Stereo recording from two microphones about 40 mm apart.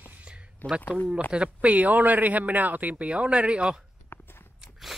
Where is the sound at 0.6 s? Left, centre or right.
Left.